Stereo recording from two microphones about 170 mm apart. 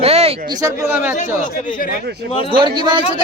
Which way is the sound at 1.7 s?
55° left (ahead or behind).